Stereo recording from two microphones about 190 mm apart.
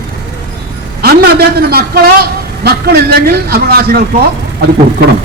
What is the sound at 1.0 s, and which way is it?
Speech, 55° right (ahead or behind).